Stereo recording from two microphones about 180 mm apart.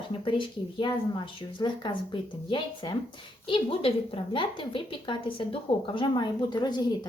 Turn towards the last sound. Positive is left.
turn(degrees=25)  # may be behind; listen again after turning